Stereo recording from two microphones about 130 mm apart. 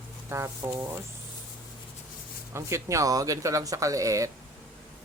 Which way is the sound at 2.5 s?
20° right (ahead or behind).